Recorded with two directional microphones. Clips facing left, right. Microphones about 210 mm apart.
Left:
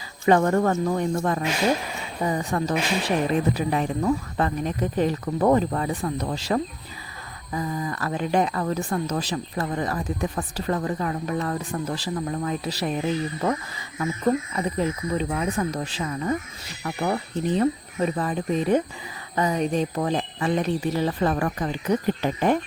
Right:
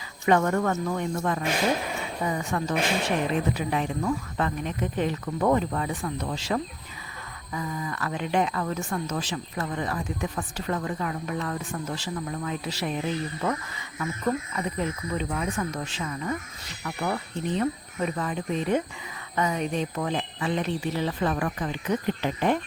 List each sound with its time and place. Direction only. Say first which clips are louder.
0.3 s speech: left 3 dB; 35° left (ahead or behind)